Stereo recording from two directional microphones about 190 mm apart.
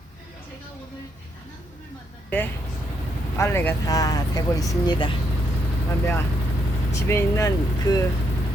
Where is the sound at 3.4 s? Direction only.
15° left (ahead or behind).